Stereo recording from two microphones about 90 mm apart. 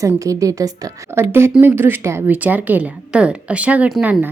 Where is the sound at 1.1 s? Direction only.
25° right (ahead or behind).